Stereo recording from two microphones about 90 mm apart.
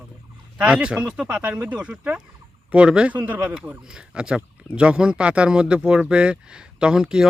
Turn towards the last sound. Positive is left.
turn(degrees=-5)  # may be behind; listen again after turning